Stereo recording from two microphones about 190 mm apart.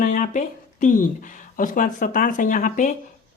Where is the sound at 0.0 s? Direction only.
45° left (ahead or behind).